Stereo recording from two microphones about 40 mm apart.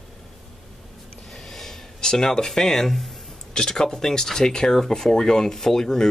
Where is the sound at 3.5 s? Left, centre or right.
Centre.